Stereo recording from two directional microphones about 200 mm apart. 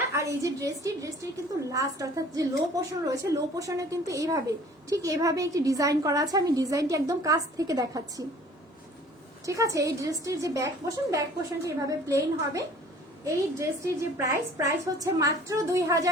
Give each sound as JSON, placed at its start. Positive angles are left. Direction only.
{"t": 0.1, "sound": "a woman's voice", "side_deg": -15}
{"t": 9.5, "sound": "a woman's voice", "side_deg": -15}